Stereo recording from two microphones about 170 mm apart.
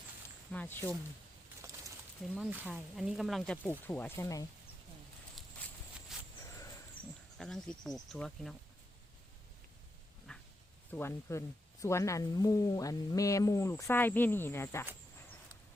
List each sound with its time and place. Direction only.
0.5 s speech: 10° left (ahead or behind)
1.6 s a sound: 20° right (ahead or behind)
2.3 s speech: centre (ahead or behind); by 4.4 s 15° left (ahead or behind)
6.1 s a sound: centre (ahead or behind)
7.3 s speech: 5° left (ahead or behind)
10.3 s dog: 5° left (ahead or behind)
10.9 s speech: 15° left (ahead or behind)